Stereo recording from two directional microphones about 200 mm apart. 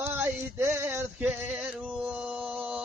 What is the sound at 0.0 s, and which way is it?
Male singing, 10° right (ahead or behind).